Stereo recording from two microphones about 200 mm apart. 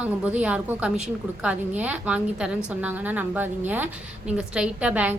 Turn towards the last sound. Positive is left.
turn(degrees=-5)  # may be behind; listen again after turning